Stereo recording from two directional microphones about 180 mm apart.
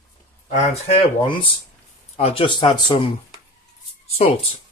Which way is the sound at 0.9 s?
30° left (ahead or behind).